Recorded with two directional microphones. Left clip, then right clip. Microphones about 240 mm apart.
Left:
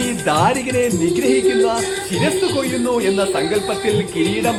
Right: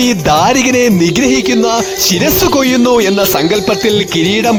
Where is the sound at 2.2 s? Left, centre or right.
Right.